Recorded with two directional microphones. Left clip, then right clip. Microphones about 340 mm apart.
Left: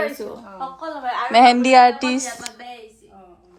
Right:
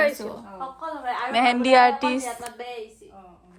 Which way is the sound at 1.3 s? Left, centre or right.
Centre.